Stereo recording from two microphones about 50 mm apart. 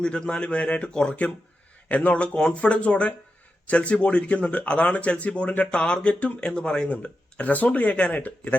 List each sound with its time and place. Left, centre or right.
0.0 s speech: centre
1.9 s a man's voice: left